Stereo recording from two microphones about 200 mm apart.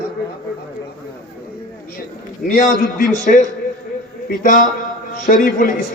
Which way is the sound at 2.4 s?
40° left (ahead or behind).